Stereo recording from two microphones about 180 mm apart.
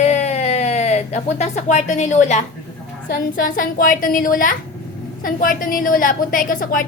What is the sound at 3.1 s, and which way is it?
A woman's voice, 50° left (ahead or behind).